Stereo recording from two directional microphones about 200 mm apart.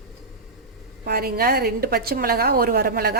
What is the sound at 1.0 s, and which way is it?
A woman's voice, 50° right (ahead or behind).